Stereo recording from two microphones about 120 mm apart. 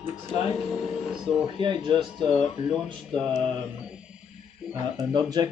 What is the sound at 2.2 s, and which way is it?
Music, centre (ahead or behind).